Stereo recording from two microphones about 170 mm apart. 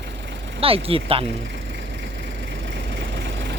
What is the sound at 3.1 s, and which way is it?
Vehicle, 90° right.